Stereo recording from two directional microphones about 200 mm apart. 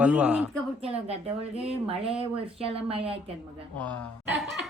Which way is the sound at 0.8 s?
30° right (ahead or behind).